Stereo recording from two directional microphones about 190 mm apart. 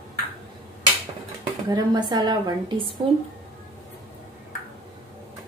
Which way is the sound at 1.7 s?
20° right (ahead or behind).